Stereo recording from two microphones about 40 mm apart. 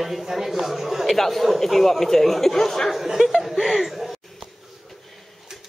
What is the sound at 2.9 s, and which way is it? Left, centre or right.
Speech, centre.